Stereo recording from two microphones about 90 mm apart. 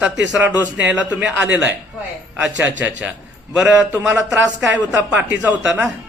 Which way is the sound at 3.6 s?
30° right (ahead or behind).